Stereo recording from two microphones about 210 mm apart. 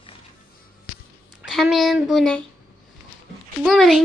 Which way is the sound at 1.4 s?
Centre (ahead or behind).